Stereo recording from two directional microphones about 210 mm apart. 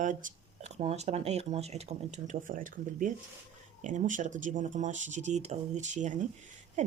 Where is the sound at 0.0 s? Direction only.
40° right (ahead or behind).